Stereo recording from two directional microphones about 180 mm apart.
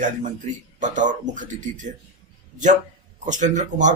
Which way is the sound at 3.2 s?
45° right (ahead or behind).